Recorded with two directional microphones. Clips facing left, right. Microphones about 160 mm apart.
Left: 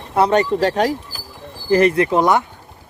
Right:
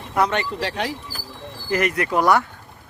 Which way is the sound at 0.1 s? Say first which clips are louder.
Left 6 dB; 30° left (ahead or behind).